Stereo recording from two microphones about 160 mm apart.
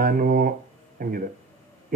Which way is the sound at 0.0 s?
65° right (ahead or behind).